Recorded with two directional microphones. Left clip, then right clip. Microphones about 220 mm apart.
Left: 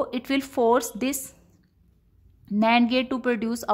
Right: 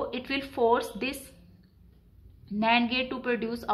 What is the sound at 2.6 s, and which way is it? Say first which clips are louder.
Speech: left 4 dB; 50° left (ahead or behind).